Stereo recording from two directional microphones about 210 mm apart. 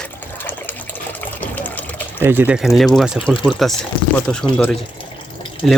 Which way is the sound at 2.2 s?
10° right (ahead or behind).